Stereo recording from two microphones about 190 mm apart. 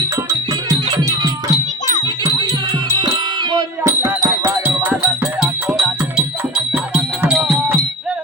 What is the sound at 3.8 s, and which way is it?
Music, 10° right (ahead or behind).